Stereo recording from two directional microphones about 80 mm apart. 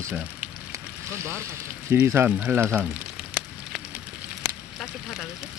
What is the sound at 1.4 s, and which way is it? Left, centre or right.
Speech, right.